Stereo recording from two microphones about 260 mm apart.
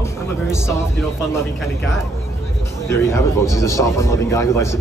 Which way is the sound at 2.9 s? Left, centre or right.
Centre.